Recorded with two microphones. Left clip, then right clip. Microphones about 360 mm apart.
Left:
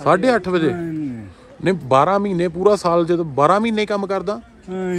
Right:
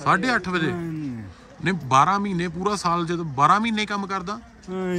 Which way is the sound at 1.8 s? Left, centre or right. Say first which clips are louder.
Left 3 dB; centre.